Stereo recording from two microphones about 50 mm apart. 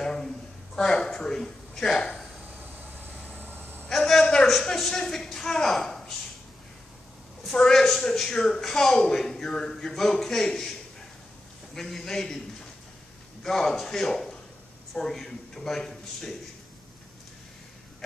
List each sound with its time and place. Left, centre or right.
0.0 s a sound: centre
0.7 s speech: centre
2.6 s vehicle: right
3.9 s a sound: centre
4.6 s a woman's voice: centre
7.5 s speech: centre
11.7 s speech: centre
13.4 s a man's voice: centre